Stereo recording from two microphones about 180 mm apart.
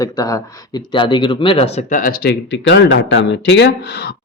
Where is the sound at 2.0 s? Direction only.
55° left (ahead or behind); by 4.1 s 75° left (ahead or behind).